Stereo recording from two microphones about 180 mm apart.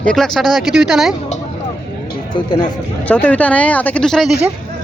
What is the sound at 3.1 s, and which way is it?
Speech, 10° left (ahead or behind).